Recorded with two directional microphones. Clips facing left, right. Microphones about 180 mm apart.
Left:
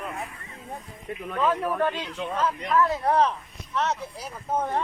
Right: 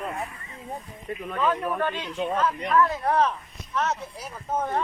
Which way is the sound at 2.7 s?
30° left (ahead or behind).